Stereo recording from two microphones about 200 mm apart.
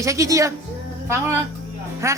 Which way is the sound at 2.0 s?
15° right (ahead or behind).